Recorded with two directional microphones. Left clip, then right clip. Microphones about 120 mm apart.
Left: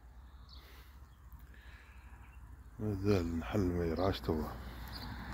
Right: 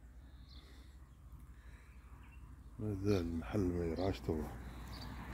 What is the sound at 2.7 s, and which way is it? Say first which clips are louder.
Speech: left 3 dB; 10° right (ahead or behind).